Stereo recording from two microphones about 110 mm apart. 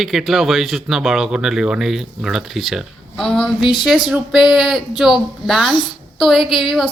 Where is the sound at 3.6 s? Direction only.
45° left (ahead or behind).